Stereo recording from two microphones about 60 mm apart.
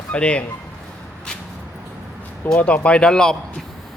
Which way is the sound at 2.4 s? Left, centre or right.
Centre.